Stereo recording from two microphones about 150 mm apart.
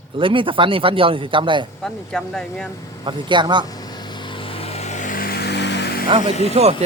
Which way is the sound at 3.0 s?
30° right (ahead or behind).